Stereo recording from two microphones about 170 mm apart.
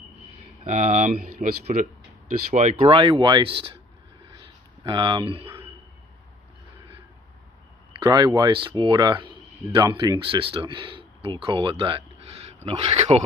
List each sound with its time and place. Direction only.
0.7 s speech: 45° right (ahead or behind)
4.8 s speech: 30° right (ahead or behind)
8.0 s speech: 25° right (ahead or behind)